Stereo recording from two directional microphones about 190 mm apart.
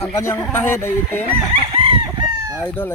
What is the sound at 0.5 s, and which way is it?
Speech, 10° left (ahead or behind).